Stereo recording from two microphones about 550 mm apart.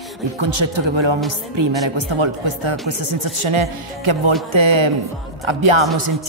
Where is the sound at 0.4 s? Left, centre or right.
Right.